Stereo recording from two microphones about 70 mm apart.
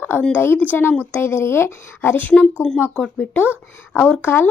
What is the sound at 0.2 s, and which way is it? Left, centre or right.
Speech, centre.